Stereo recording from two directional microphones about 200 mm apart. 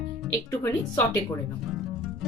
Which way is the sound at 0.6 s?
15° left (ahead or behind).